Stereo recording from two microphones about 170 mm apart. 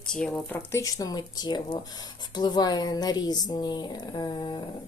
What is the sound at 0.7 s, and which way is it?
Speech, 20° left (ahead or behind).